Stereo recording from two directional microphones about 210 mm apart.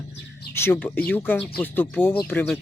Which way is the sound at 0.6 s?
10° left (ahead or behind).